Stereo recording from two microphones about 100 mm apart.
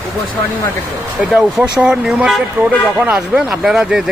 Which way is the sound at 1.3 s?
10° right (ahead or behind).